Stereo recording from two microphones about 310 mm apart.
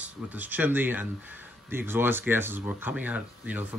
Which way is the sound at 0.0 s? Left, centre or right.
Centre.